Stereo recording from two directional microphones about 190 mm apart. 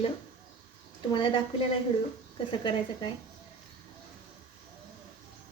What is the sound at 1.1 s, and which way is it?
Speech, 25° left (ahead or behind).